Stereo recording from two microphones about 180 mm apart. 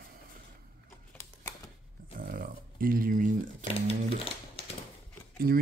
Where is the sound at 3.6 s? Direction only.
30° left (ahead or behind).